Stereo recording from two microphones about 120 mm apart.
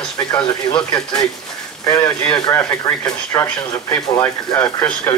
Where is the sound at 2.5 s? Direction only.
15° left (ahead or behind).